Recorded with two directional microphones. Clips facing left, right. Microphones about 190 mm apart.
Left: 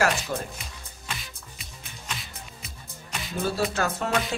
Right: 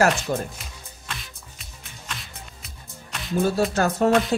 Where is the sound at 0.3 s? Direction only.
45° right (ahead or behind).